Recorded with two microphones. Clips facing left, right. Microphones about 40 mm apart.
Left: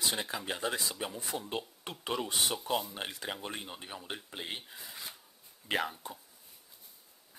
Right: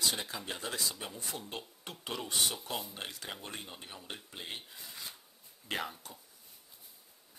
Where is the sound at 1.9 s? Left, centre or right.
Left; by 6.0 s centre.